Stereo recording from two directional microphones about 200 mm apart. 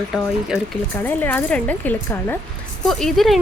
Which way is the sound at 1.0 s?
10° left (ahead or behind).